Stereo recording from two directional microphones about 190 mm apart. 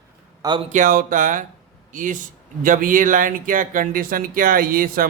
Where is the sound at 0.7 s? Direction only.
45° right (ahead or behind).